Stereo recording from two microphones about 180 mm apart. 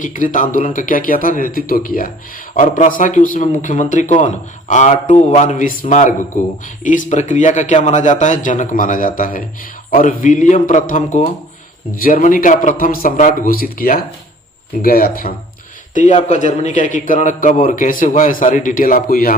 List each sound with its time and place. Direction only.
0.0 s a man's voice: 45° left (ahead or behind)
16.0 s a man's voice: 40° left (ahead or behind)